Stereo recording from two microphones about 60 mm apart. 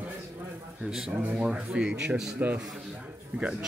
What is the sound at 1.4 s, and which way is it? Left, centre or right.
Speech, centre.